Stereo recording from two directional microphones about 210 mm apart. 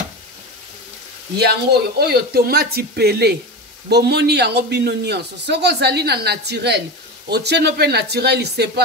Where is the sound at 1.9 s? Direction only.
50° right (ahead or behind).